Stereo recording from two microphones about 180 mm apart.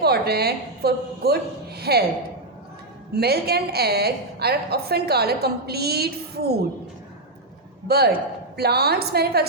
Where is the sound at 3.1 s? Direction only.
60° right (ahead or behind).